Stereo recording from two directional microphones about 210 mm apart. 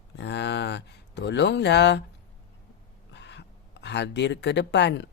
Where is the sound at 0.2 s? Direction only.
55° left (ahead or behind).